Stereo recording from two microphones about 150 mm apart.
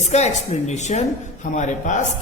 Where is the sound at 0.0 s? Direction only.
50° left (ahead or behind).